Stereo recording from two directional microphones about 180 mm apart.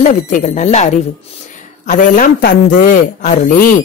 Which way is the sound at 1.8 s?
50° left (ahead or behind).